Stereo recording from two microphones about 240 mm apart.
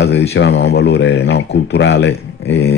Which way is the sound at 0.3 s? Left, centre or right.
Left.